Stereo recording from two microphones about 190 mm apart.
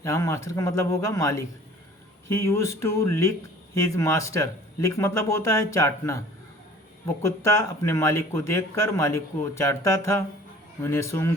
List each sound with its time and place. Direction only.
0.0 s a man's voice: 15° left (ahead or behind)
7.4 s a man's voice: 15° left (ahead or behind)